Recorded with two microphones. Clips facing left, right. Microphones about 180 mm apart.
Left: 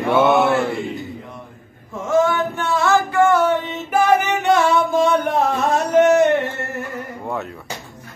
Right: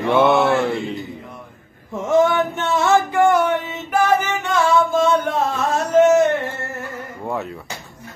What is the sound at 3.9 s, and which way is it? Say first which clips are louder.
Music: left 2 dB; 10° left (ahead or behind).